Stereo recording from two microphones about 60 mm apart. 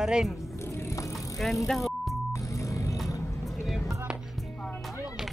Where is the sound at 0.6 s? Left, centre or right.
Left.